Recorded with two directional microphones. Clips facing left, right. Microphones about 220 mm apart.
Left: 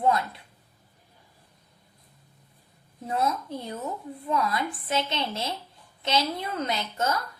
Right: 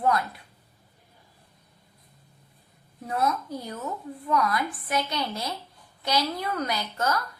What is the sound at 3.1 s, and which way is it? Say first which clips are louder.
A woman's voice: even; 25° left (ahead or behind).